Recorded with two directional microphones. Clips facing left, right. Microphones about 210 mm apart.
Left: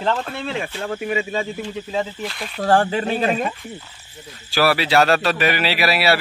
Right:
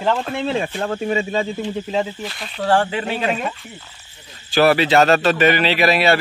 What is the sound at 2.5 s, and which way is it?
Speech, 45° left (ahead or behind).